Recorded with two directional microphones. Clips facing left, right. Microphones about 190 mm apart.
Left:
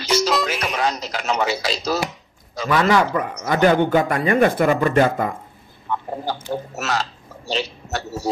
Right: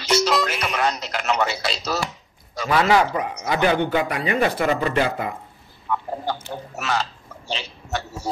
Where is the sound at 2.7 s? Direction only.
45° left (ahead or behind).